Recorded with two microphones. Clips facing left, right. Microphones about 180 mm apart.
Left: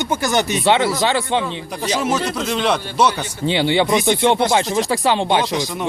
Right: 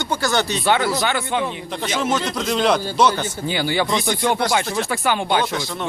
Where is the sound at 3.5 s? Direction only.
25° left (ahead or behind).